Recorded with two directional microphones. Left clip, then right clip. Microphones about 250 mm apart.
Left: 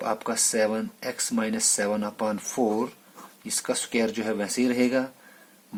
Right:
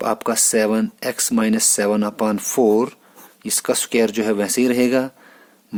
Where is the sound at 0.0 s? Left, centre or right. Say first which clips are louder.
Right 7 dB; right.